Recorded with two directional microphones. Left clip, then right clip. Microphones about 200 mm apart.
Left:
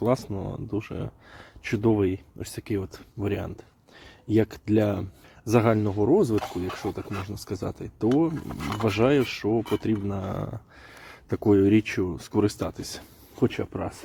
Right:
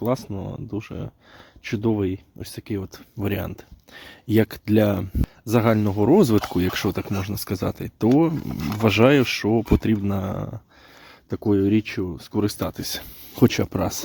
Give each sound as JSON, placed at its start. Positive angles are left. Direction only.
{"t": 0.0, "sound": "speech", "side_deg": -20}
{"t": 3.2, "sound": "speech", "side_deg": -35}
{"t": 8.4, "sound": "speech", "side_deg": -10}
{"t": 8.8, "sound": "speech", "side_deg": -40}
{"t": 12.5, "sound": "speech", "side_deg": -35}